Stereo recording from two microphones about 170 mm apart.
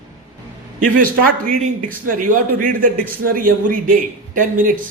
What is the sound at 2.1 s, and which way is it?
Speech, 55° right (ahead or behind).